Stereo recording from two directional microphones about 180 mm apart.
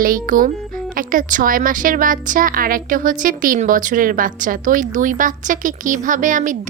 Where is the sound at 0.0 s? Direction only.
50° right (ahead or behind).